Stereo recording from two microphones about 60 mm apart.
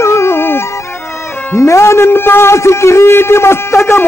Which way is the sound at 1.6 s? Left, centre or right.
Left.